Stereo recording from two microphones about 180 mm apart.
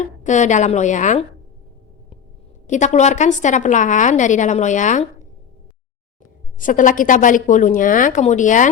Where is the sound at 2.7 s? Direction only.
40° left (ahead or behind).